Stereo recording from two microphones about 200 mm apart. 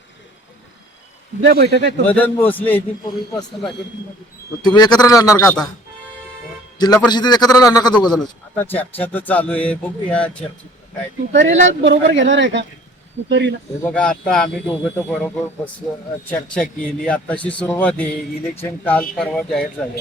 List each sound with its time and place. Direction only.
1.4 s speech: 55° right (ahead or behind)
2.0 s speech: 10° left (ahead or behind)
3.0 s a man's voice: 20° left (ahead or behind)
4.6 s a man's voice: 20° left (ahead or behind)
6.7 s a man's voice: 20° left (ahead or behind)
11.4 s speech: 65° right (ahead or behind)
13.8 s speech: 5° left (ahead or behind)